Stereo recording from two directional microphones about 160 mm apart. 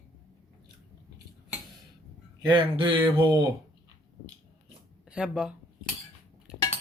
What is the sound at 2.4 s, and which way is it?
Speech, 25° right (ahead or behind).